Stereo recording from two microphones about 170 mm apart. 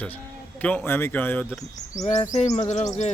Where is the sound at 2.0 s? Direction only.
45° left (ahead or behind).